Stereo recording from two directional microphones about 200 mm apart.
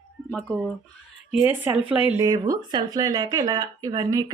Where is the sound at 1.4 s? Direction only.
10° right (ahead or behind).